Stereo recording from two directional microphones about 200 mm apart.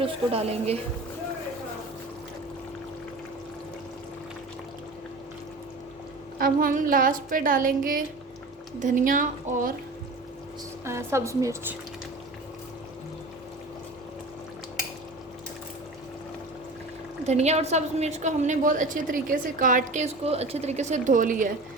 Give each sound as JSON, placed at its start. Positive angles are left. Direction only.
{"t": 0.0, "sound": "a woman's voice", "side_deg": -30}
{"t": 6.4, "sound": "a woman's voice", "side_deg": -45}
{"t": 10.8, "sound": "a woman's voice", "side_deg": -15}
{"t": 17.2, "sound": "a woman's voice", "side_deg": -35}